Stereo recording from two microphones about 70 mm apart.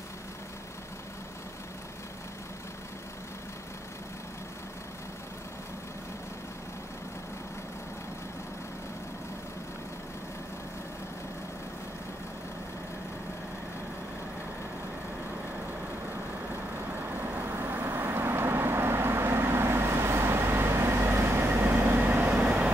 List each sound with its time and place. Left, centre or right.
17.3 s vehicle: right